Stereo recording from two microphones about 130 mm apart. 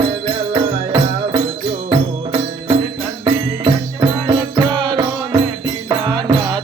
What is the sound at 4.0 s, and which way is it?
Music, 35° right (ahead or behind).